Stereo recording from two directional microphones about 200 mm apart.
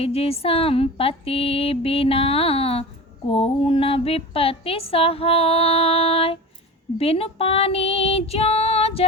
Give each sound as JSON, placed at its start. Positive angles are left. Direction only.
{"t": 0.0, "sound": "a woman's voice", "side_deg": 30}